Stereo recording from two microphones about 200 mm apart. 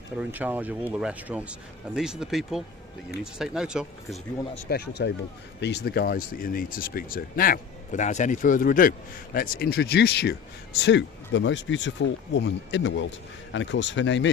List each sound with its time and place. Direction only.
0.2 s speech: 10° right (ahead or behind)
4.7 s speech: 55° left (ahead or behind)